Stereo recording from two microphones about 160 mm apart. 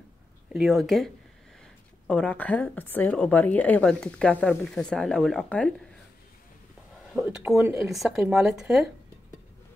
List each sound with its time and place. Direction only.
0.5 s a woman's voice: centre (ahead or behind)
7.1 s speech: 5° right (ahead or behind)
7.4 s speech: 15° right (ahead or behind)
7.9 s speech: centre (ahead or behind)